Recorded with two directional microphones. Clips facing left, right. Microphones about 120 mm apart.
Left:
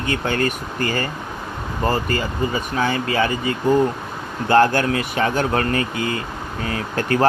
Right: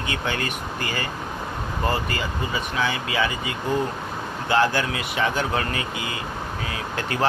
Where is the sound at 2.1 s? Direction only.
45° left (ahead or behind).